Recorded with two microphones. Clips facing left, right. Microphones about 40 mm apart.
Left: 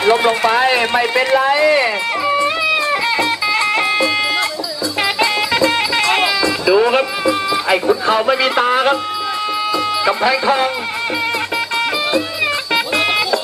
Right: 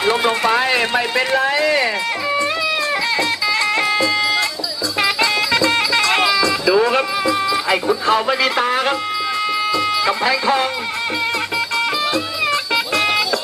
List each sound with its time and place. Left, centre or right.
0.0 s speech: centre
3.2 s music: left
6.1 s sheep: centre
7.5 s speech: centre
9.8 s music: centre
12.1 s music: centre